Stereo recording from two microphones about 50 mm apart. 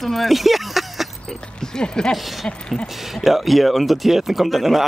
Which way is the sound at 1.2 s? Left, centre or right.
Centre.